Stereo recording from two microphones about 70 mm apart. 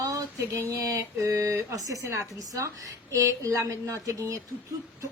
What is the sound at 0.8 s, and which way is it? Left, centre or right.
A woman's voice, right.